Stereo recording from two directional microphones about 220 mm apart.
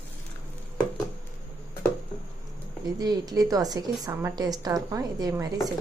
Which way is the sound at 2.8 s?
15° right (ahead or behind).